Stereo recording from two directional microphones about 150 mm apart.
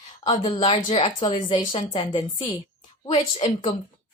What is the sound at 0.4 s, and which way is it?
A woman's voice, 40° left (ahead or behind).